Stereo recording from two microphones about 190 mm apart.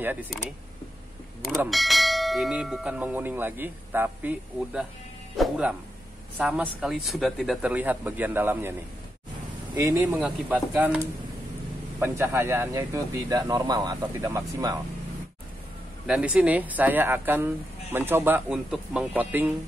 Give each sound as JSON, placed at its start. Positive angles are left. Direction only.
{"t": 0.0, "sound": "speech", "side_deg": -10}
{"t": 1.7, "sound": "bell", "side_deg": 0}
{"t": 5.4, "sound": "speech", "side_deg": -5}
{"t": 9.8, "sound": "speech", "side_deg": -10}
{"t": 16.1, "sound": "speech", "side_deg": -5}